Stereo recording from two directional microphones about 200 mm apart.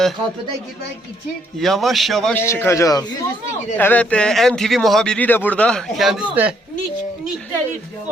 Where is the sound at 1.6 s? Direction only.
Centre (ahead or behind).